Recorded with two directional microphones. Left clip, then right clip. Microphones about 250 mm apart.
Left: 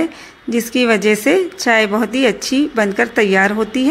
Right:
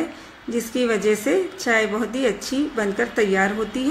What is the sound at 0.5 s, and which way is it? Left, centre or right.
A woman's voice, left.